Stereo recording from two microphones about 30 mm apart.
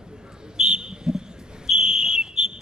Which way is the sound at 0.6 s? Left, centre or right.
Right.